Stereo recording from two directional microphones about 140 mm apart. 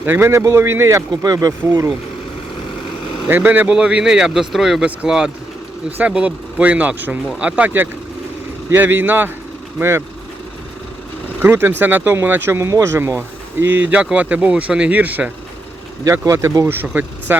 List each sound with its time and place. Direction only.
0.0 s speech: 15° right (ahead or behind)
3.2 s speech: 15° right (ahead or behind)
11.4 s speech: 15° right (ahead or behind)
16.0 s speech: 25° right (ahead or behind)